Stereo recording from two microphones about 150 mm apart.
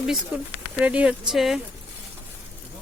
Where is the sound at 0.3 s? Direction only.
10° right (ahead or behind).